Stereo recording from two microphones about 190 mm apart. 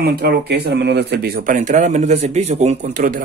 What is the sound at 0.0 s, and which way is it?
Speech, 60° right (ahead or behind).